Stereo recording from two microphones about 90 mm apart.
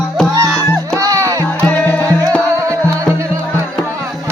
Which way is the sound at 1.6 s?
20° left (ahead or behind).